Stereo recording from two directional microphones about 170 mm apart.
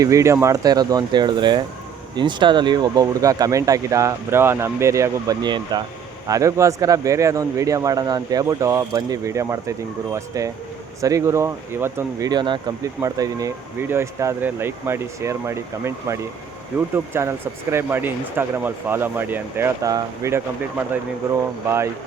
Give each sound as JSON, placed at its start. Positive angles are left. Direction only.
{"t": 0.0, "sound": "a man's voice", "side_deg": -20}